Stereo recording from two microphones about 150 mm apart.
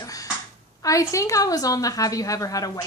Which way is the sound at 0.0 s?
25° left (ahead or behind).